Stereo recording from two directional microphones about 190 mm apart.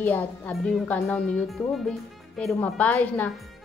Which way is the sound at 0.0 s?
5° left (ahead or behind).